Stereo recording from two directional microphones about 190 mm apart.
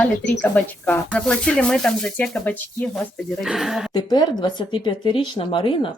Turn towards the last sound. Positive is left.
turn(degrees=25)  # may be behind; listen again after turning